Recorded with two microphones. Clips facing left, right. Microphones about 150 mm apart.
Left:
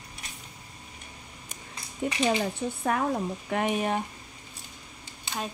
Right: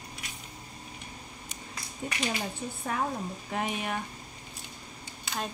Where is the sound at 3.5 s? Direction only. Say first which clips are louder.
Left 4 dB; 65° left (ahead or behind).